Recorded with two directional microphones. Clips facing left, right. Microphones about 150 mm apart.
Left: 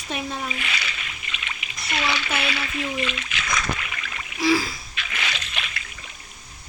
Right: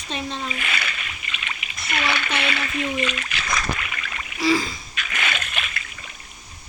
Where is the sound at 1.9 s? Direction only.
55° right (ahead or behind).